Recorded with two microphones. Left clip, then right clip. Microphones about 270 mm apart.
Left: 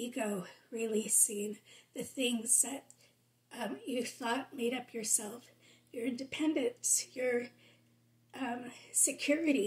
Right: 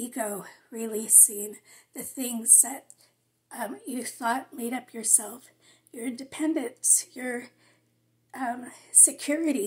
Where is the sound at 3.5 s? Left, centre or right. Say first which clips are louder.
Right 5 dB; centre.